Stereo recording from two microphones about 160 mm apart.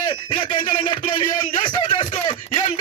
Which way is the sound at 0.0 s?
30° left (ahead or behind).